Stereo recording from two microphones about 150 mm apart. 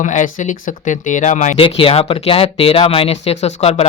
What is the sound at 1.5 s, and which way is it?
Speech, 40° left (ahead or behind).